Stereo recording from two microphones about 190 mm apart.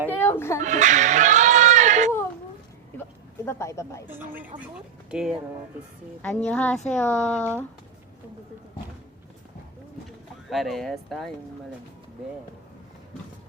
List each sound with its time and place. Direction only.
0.1 s a sound: 10° left (ahead or behind)
0.6 s a sound: 40° right (ahead or behind)
3.4 s speech: 15° left (ahead or behind)
4.0 s speech: 10° right (ahead or behind)
6.2 s speech: 5° left (ahead or behind)
10.5 s speech: centre (ahead or behind)